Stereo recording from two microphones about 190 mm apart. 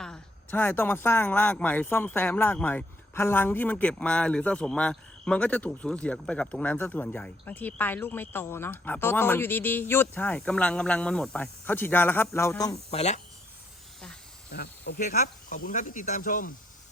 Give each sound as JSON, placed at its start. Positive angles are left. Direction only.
{"t": 0.0, "sound": "a man's voice", "side_deg": 5}
{"t": 12.7, "sound": "speech", "side_deg": 35}
{"t": 14.5, "sound": "speech", "side_deg": 55}